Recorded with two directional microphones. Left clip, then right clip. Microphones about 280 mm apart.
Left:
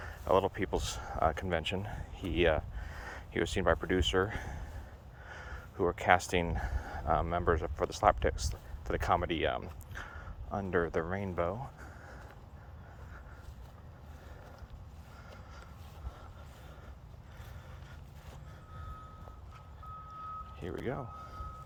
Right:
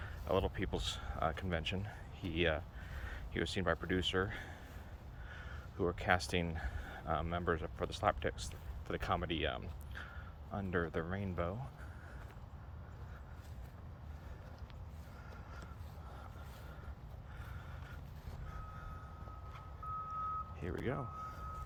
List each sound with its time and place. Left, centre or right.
0.0 s speech: centre
20.6 s speech: centre